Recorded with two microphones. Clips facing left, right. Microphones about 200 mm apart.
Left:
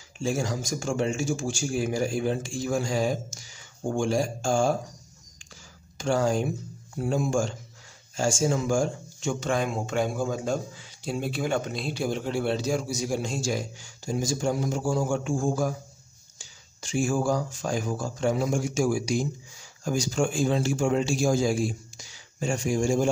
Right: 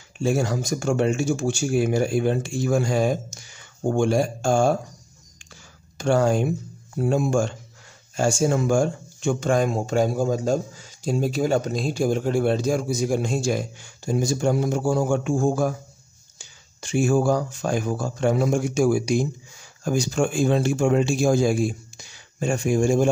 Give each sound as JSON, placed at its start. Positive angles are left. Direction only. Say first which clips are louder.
{"t": 0.2, "sound": "speech", "louder": "right 5 dB", "side_deg": -60}
{"t": 5.9, "sound": "speech", "louder": "right 4 dB", "side_deg": -60}